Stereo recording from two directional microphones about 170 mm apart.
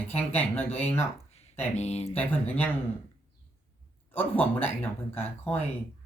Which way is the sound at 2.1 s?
10° left (ahead or behind).